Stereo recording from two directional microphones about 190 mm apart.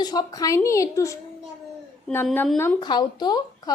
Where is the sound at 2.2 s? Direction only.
5° left (ahead or behind).